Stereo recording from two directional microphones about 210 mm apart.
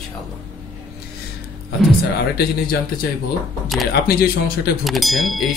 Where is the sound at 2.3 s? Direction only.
45° left (ahead or behind).